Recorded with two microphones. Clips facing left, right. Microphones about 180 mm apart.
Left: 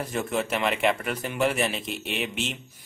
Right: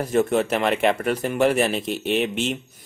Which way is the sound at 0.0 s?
40° right (ahead or behind).